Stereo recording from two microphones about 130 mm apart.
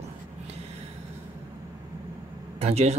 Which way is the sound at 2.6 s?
55° right (ahead or behind).